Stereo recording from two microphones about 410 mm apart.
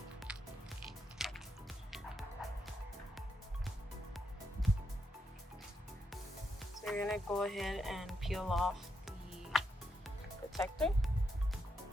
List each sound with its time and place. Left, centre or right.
0.3 s music: centre
2.4 s music: centre
6.8 s speech: centre